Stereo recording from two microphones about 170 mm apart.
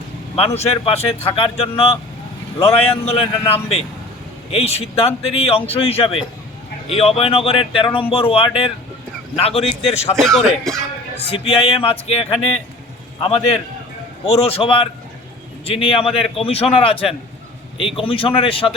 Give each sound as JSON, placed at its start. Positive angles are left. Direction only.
{"t": 0.3, "sound": "speech", "side_deg": 35}
{"t": 10.2, "sound": "speech", "side_deg": 0}
{"t": 11.3, "sound": "a man's voice", "side_deg": 35}
{"t": 14.4, "sound": "speech", "side_deg": 35}